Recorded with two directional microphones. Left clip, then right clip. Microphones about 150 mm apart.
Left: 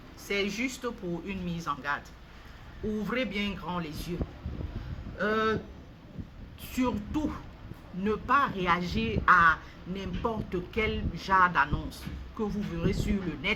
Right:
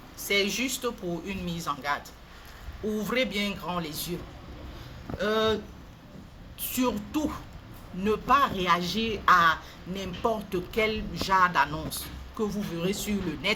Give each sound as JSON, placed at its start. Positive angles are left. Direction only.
{"t": 0.2, "sound": "a man's voice", "side_deg": 20}
{"t": 3.0, "sound": "a man's voice", "side_deg": 20}
{"t": 5.1, "sound": "speech", "side_deg": 20}
{"t": 6.6, "sound": "a man's voice", "side_deg": 20}